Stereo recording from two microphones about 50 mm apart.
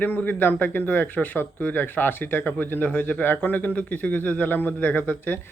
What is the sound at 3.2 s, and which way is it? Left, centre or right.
Speech, left.